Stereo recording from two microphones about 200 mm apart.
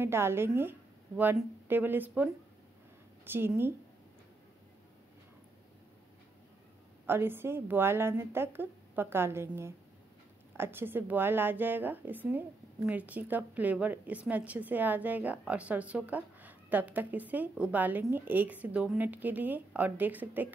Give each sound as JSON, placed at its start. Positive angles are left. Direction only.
{"t": 0.0, "sound": "a woman's voice", "side_deg": -10}
{"t": 3.3, "sound": "a woman's voice", "side_deg": -10}
{"t": 7.1, "sound": "a woman's voice", "side_deg": -10}